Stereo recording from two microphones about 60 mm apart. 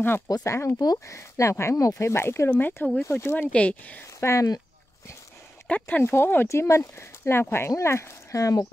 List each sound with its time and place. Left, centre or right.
0.5 s speech: left
0.7 s speech: left
1.1 s speech: left
2.0 s speech: left
2.5 s speech: left
3.1 s speech: left
3.3 s speech: left
4.2 s speech: left
5.7 s speech: left
6.0 s speech: left
6.5 s speech: left